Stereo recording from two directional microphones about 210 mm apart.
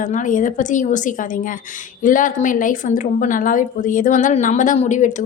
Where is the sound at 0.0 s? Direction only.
40° left (ahead or behind).